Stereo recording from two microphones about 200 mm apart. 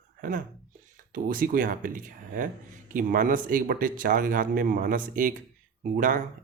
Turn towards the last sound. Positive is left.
turn(degrees=-40)  # may be behind; listen again after turning